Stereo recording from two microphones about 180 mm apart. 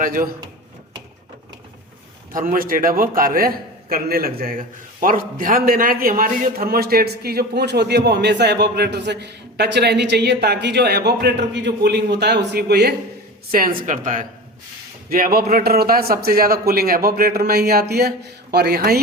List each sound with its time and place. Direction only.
0.0 s speech: 50° right (ahead or behind)
2.3 s a man's voice: 50° right (ahead or behind); by 12.9 s 65° right (ahead or behind)
13.5 s a man's voice: 50° right (ahead or behind)